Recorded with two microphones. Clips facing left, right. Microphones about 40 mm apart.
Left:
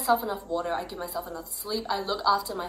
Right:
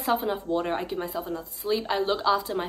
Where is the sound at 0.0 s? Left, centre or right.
Right.